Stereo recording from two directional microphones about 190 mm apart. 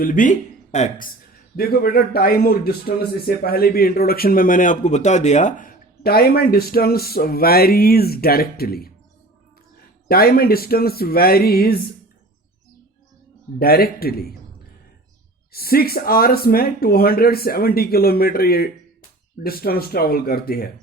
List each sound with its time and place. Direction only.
0.0 s a man's voice: 45° left (ahead or behind)
10.1 s a man's voice: 50° left (ahead or behind)
13.6 s a man's voice: 50° left (ahead or behind)
15.5 s a man's voice: 50° left (ahead or behind)